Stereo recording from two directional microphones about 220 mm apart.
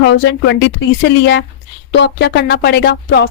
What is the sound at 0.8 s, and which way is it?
Speech, 55° left (ahead or behind).